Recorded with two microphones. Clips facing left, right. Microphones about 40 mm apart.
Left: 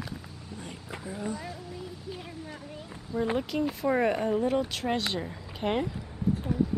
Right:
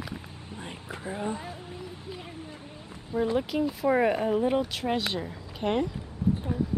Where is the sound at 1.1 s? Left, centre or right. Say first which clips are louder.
Right 2 dB; right.